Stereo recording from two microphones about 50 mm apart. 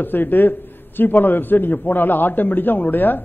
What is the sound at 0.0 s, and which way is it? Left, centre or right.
A man's voice, left.